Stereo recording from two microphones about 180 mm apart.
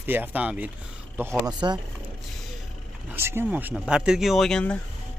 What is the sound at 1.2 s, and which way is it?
Speech, 20° right (ahead or behind).